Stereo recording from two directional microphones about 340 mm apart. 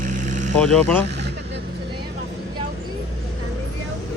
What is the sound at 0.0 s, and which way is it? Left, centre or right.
Vehicle, right.